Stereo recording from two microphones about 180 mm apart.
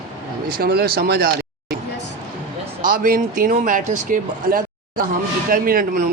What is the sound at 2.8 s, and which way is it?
Speech, 50° right (ahead or behind).